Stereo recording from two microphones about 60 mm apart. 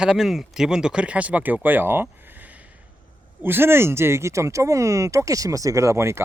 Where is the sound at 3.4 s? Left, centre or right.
Right.